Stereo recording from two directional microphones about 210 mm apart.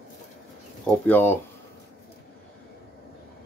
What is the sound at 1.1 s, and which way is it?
Speech, 10° left (ahead or behind).